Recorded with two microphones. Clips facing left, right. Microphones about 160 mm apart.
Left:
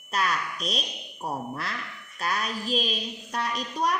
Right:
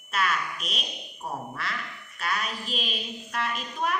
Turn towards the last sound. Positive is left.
turn(degrees=40)  # may be behind; listen again after turning